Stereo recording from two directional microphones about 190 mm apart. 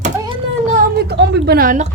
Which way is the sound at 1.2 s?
60° right (ahead or behind).